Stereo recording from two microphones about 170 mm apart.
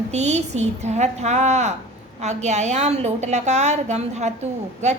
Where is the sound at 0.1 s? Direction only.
40° right (ahead or behind).